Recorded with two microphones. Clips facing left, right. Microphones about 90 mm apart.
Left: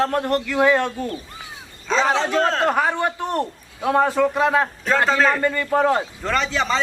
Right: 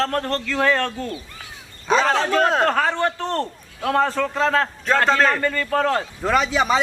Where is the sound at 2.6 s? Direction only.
10° left (ahead or behind).